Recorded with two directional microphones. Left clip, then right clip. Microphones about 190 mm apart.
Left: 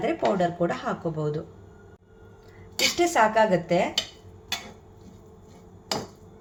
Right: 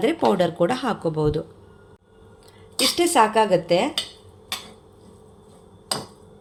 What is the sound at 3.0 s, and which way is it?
Speech, 45° right (ahead or behind).